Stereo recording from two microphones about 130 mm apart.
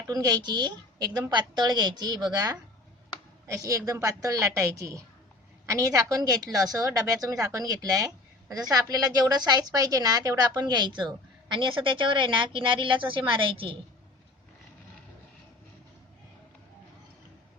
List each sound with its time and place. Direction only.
0.1 s a woman's voice: 30° right (ahead or behind)